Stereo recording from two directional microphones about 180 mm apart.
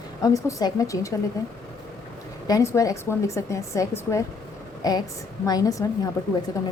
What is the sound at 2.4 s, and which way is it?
A woman's voice, 20° left (ahead or behind).